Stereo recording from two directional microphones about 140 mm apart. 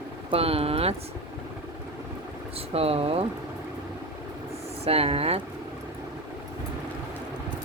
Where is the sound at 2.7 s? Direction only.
45° right (ahead or behind).